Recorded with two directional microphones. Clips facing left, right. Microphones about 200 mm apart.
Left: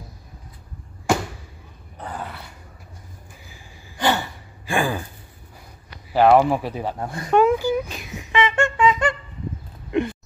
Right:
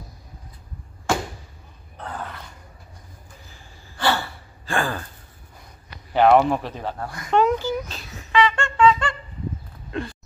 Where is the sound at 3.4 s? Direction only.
10° left (ahead or behind).